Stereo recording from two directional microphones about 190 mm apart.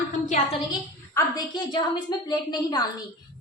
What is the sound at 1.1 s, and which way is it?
A woman's voice, 20° left (ahead or behind).